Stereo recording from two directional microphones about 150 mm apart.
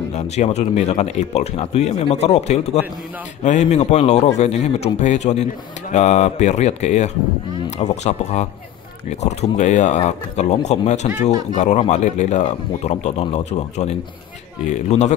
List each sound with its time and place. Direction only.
0.1 s a man's voice: 45° left (ahead or behind)